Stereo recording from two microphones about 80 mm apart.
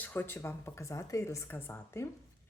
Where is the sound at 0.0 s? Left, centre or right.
Left.